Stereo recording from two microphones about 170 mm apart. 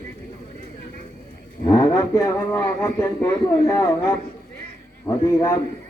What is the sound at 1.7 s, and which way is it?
A man's voice, 25° left (ahead or behind).